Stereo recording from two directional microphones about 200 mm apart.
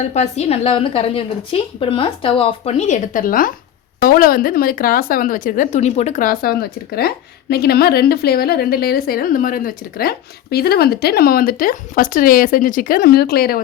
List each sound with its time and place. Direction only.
0.0 s a woman's voice: 35° left (ahead or behind); by 13.6 s 50° left (ahead or behind)